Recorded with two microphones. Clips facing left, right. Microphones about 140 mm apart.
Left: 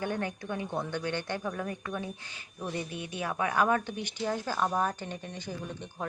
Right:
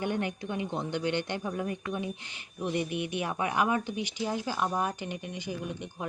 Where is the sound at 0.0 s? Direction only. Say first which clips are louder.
Right 2 dB; 20° right (ahead or behind).